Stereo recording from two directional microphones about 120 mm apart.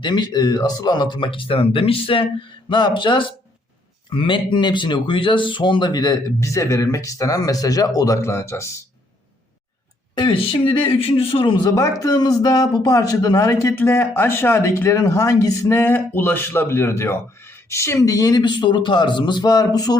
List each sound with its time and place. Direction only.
0.0 s speech: 35° left (ahead or behind)
10.2 s speech: 45° left (ahead or behind)
11.7 s speech: 30° left (ahead or behind)
15.8 s speech: 15° left (ahead or behind); by 20.0 s 35° left (ahead or behind)